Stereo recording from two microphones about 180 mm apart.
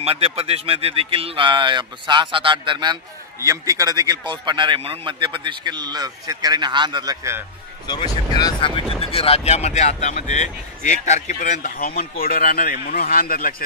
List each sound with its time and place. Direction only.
0.0 s speech: 35° right (ahead or behind); by 7.4 s 20° right (ahead or behind)
7.8 s speech: 25° left (ahead or behind); by 13.6 s 55° left (ahead or behind)